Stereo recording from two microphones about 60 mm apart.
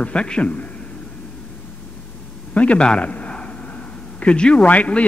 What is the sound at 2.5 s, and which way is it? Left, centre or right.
A man's voice, centre.